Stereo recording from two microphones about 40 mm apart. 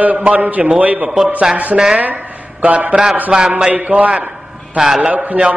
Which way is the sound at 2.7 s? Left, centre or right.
Right.